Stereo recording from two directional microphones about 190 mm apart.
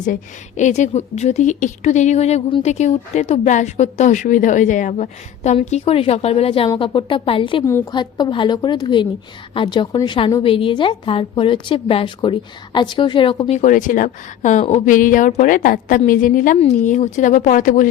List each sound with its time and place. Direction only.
0.0 s a woman's voice: 40° left (ahead or behind)
7.6 s a woman's voice: 15° left (ahead or behind)
13.6 s speech: 45° left (ahead or behind)